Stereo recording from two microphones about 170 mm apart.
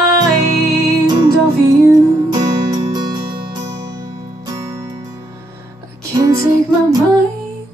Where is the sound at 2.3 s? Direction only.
25° right (ahead or behind).